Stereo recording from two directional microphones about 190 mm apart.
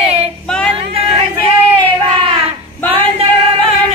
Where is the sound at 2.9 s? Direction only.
30° right (ahead or behind).